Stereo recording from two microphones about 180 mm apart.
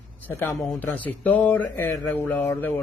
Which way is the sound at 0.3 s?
10° left (ahead or behind).